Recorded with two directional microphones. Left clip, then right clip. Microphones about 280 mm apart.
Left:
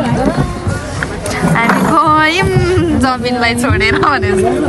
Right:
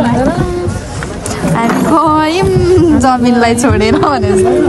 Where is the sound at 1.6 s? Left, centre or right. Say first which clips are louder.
Even; centre.